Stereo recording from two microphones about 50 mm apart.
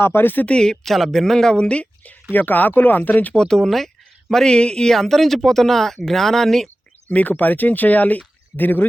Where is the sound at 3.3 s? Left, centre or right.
Centre.